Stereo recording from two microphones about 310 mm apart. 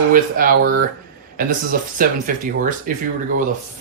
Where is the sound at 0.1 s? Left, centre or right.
Right.